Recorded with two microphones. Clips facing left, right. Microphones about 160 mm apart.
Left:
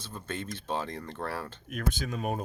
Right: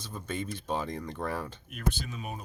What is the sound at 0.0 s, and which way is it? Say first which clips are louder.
Speech: right 2 dB; 10° right (ahead or behind).